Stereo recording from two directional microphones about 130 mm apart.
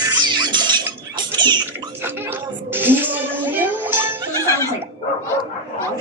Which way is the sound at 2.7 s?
15° right (ahead or behind).